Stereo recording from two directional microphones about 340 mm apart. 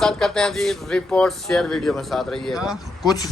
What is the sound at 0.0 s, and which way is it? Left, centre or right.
Speech, centre.